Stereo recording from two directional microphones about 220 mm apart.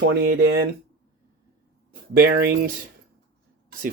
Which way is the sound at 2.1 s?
45° right (ahead or behind).